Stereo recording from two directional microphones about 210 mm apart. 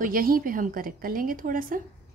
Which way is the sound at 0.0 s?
40° right (ahead or behind).